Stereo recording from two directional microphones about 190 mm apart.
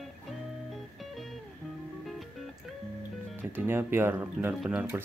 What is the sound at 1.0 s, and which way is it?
Music, centre (ahead or behind).